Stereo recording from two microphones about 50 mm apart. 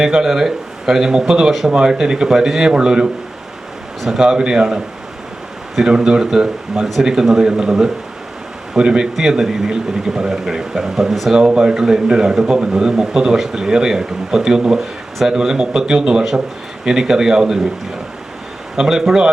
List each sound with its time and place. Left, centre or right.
0.0 s a man's voice: centre
6.8 s speech: centre
7.1 s a man's voice: centre
11.3 s a man's voice: centre
18.8 s a man's voice: centre